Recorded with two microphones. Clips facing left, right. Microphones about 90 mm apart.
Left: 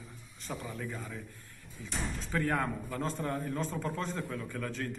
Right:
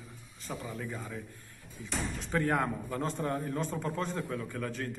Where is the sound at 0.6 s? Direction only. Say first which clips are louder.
Right 1 dB; 20° right (ahead or behind).